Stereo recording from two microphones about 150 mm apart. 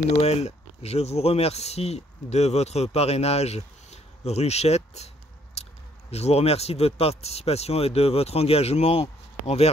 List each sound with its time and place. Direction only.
0.1 s speech: 45° left (ahead or behind)